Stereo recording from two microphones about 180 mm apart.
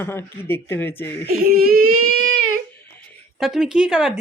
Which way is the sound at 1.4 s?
55° right (ahead or behind).